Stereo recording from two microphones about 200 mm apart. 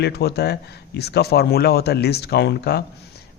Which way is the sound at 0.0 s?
55° left (ahead or behind).